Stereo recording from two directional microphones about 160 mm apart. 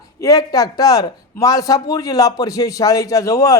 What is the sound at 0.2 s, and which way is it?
A woman's voice, 20° left (ahead or behind).